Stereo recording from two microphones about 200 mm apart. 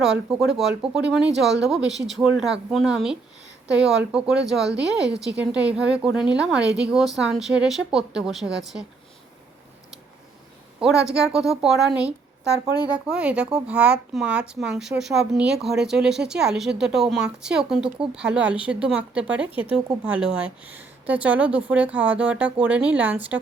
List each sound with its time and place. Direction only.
0.0 s a woman's voice: centre (ahead or behind)
4.7 s a woman's voice: 60° right (ahead or behind)
5.4 s a woman's voice: 5° right (ahead or behind)
11.1 s a woman's voice: 5° right (ahead or behind)